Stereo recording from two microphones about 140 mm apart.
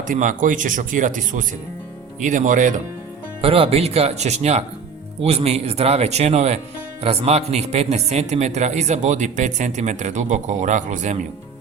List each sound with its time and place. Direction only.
0.1 s speech: 65° right (ahead or behind)
3.4 s speech: 40° right (ahead or behind); by 11.3 s 60° right (ahead or behind)